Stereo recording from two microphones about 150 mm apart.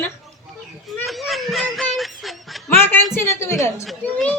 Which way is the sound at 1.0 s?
Centre (ahead or behind).